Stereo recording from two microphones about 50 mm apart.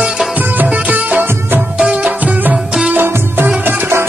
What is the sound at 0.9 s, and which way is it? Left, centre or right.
Music, right.